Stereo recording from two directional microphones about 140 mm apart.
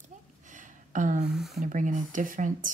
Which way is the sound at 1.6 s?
65° right (ahead or behind).